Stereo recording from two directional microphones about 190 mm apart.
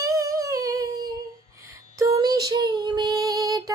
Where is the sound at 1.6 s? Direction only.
15° right (ahead or behind).